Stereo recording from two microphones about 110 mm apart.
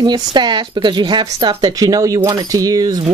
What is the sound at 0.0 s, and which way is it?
Speech, 40° right (ahead or behind).